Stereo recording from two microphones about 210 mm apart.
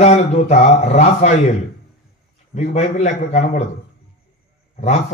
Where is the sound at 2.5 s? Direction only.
35° left (ahead or behind).